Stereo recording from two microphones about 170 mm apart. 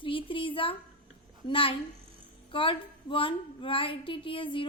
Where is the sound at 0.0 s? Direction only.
30° left (ahead or behind).